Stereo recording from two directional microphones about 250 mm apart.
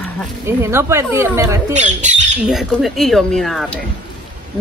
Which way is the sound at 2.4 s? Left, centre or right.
Centre.